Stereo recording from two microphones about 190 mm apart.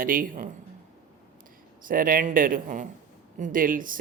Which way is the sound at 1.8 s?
45° right (ahead or behind).